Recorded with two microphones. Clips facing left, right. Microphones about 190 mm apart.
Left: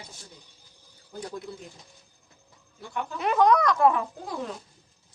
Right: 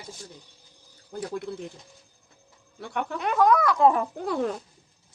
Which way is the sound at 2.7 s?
65° right (ahead or behind).